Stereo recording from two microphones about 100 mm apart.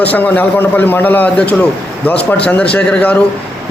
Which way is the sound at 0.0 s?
15° left (ahead or behind).